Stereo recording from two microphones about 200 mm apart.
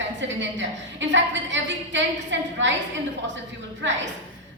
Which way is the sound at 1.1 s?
65° right (ahead or behind).